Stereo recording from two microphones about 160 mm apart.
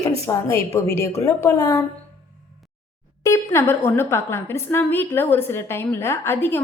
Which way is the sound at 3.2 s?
15° left (ahead or behind).